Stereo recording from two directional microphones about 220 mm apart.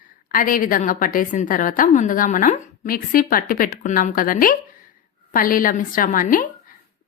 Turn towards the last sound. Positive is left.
turn(degrees=40)  # may be behind; listen again after turning